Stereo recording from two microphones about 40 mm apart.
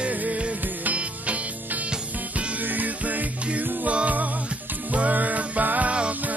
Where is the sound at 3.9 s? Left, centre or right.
Right.